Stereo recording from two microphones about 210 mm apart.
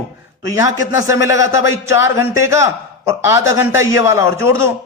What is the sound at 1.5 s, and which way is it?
Speech, 65° left (ahead or behind).